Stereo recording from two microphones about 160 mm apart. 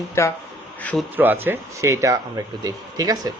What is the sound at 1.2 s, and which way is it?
Speech, 10° right (ahead or behind).